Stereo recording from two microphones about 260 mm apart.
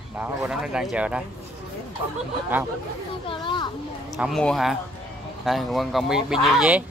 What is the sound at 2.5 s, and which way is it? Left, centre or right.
Speech, centre.